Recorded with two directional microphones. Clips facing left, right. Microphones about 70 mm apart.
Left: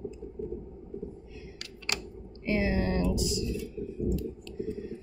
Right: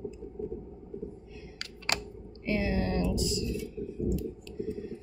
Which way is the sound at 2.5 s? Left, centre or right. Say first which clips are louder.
Left 2 dB; centre.